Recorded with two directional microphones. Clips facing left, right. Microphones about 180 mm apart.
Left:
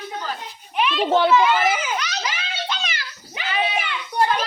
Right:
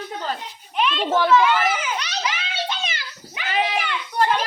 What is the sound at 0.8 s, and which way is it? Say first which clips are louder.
Speech: left 1 dB; 5° left (ahead or behind).